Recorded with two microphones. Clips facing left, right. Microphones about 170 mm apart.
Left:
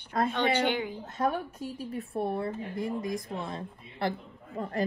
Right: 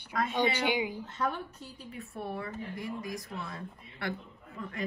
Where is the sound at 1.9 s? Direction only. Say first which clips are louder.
Left 6 dB; 35° left (ahead or behind).